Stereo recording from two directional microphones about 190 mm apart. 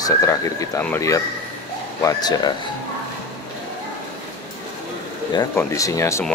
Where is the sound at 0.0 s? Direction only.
20° left (ahead or behind).